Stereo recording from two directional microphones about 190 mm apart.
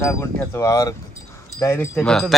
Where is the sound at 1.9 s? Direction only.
Centre (ahead or behind).